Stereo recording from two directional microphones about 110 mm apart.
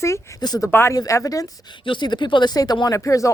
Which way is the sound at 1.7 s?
50° left (ahead or behind).